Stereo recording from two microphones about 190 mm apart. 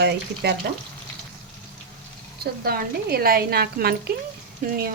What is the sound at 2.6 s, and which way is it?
Speech, 55° right (ahead or behind).